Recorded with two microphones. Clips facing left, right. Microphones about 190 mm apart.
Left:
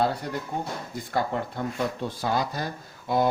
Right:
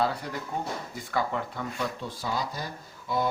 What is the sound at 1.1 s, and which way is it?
Speech, 50° left (ahead or behind).